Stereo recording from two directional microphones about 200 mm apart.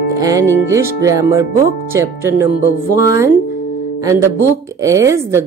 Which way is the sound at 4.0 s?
15° right (ahead or behind).